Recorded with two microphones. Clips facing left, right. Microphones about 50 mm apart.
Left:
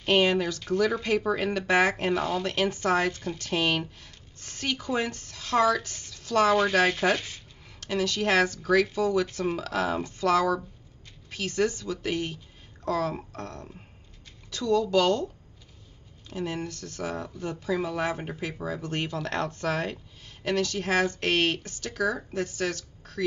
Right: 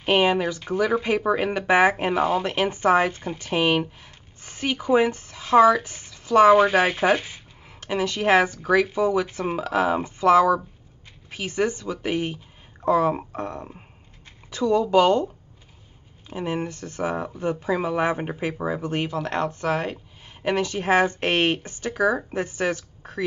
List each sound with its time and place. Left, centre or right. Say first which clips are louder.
0.0 s speech: right 3 dB; centre
16.3 s speech: right 5 dB; right